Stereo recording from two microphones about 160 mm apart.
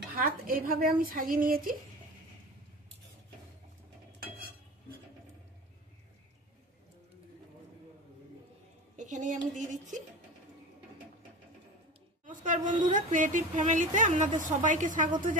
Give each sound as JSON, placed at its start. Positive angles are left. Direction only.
{"t": 0.1, "sound": "speech", "side_deg": -65}
{"t": 8.9, "sound": "a sound", "side_deg": -50}
{"t": 9.6, "sound": "a woman's voice", "side_deg": -50}
{"t": 12.3, "sound": "a woman's voice", "side_deg": -55}